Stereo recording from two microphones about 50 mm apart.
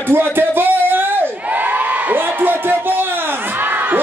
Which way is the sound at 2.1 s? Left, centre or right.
Right.